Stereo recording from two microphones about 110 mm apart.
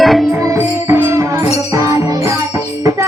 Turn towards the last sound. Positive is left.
turn(degrees=-30)  # may be behind; listen again after turning